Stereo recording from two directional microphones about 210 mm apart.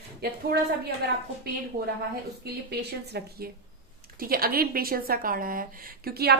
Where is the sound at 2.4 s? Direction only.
50° right (ahead or behind).